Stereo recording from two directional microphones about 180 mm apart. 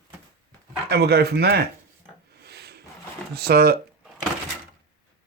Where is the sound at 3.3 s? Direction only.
60° right (ahead or behind).